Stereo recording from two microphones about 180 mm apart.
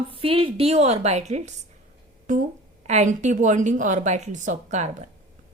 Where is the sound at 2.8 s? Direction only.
40° right (ahead or behind).